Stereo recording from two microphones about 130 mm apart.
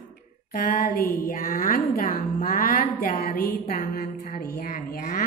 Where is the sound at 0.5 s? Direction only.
90° left.